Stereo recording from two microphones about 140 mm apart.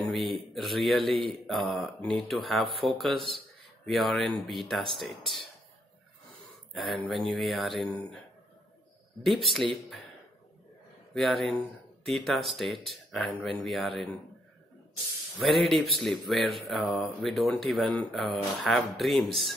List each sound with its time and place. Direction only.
0.0 s a sound: centre (ahead or behind)
1.0 s speech: 40° right (ahead or behind)
1.5 s speech: centre (ahead or behind)
6.5 s speech: centre (ahead or behind)
9.2 s speech: centre (ahead or behind)
11.1 s speech: centre (ahead or behind)
15.3 s speech: centre (ahead or behind)